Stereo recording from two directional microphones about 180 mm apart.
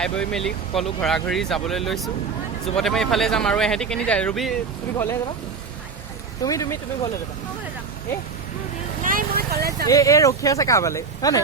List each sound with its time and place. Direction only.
0.0 s speech: 5° left (ahead or behind)
6.4 s speech: 20° left (ahead or behind)
9.0 s vehicle: 55° right (ahead or behind)
9.8 s speech: 20° left (ahead or behind)